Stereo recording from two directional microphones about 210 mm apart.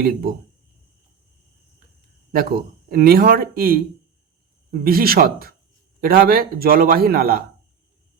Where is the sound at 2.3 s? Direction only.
45° right (ahead or behind).